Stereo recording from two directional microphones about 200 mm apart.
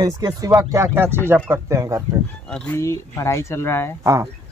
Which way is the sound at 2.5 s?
10° left (ahead or behind).